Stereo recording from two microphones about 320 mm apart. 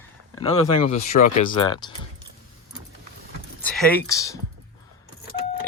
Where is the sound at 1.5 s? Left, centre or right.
Centre.